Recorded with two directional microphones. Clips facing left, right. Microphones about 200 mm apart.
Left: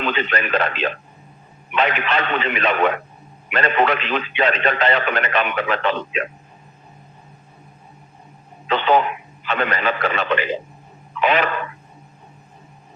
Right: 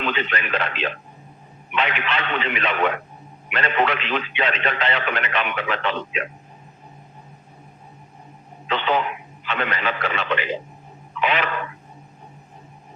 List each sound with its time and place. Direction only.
0.0 s a man's voice: 40° left (ahead or behind)
8.6 s a man's voice: 45° left (ahead or behind)